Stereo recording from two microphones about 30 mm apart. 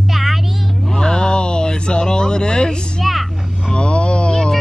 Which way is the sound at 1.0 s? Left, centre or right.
Left.